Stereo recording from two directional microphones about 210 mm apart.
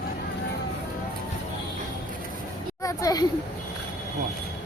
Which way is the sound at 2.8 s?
15° left (ahead or behind).